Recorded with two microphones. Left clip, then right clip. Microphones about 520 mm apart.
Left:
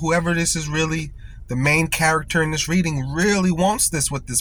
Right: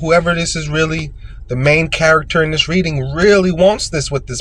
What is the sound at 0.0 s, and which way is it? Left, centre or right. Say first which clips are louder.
Speech: right 7 dB; left.